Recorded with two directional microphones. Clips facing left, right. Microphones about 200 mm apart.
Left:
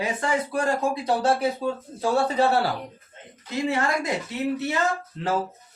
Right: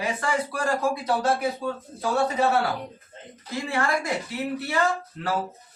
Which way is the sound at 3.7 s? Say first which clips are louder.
Even; 20° left (ahead or behind).